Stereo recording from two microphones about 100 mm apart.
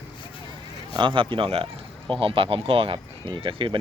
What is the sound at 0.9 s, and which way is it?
Speech, 55° right (ahead or behind).